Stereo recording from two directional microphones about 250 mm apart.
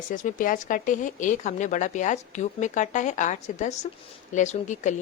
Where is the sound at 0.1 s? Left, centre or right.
Left.